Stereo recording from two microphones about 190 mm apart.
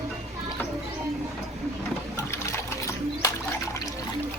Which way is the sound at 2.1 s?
15° left (ahead or behind).